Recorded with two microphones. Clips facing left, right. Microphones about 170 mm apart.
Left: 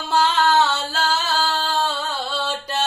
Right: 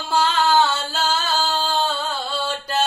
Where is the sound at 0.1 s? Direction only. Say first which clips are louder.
Even; centre (ahead or behind).